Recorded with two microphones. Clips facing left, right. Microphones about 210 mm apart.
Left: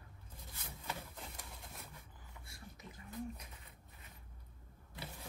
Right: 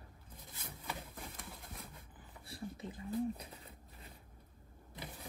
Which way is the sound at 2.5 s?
30° right (ahead or behind).